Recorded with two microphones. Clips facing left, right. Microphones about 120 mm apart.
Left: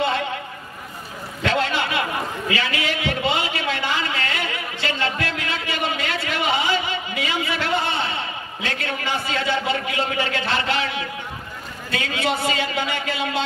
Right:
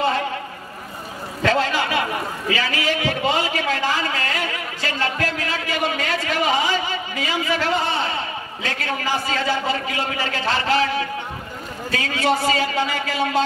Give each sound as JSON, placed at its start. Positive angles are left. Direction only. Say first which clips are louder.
{"t": 1.4, "sound": "a man's voice", "louder": "right 2 dB", "side_deg": -40}
{"t": 2.5, "sound": "a sound", "louder": "right 3 dB", "side_deg": -40}
{"t": 8.6, "sound": "a man's voice", "louder": "right 2 dB", "side_deg": -40}